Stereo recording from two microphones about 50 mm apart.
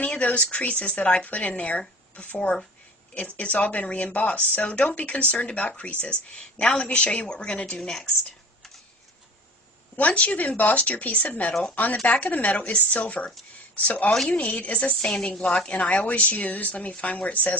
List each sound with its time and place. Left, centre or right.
0.0 s a sound: left
0.5 s a woman's voice: left
4.6 s a woman's voice: left
10.0 s a woman's voice: left